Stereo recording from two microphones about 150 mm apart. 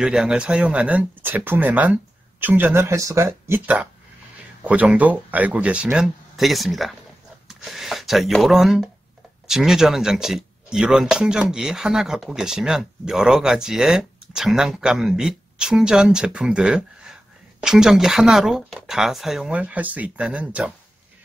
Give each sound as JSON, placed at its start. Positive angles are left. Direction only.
{"t": 0.0, "sound": "speech", "side_deg": -5}